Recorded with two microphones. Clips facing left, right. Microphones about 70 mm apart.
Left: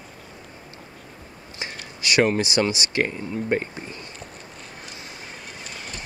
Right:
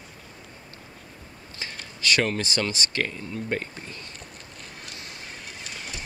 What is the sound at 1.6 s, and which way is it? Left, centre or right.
Speech, centre.